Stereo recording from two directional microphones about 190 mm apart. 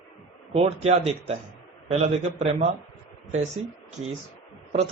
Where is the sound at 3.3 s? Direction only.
35° right (ahead or behind).